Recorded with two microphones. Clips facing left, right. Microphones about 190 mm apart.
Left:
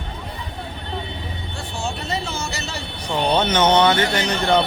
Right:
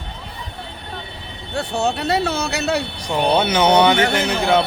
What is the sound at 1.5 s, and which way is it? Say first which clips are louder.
Speech: right 9 dB; 65° right (ahead or behind).